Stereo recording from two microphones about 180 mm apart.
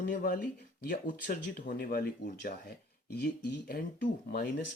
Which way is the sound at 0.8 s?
50° left (ahead or behind).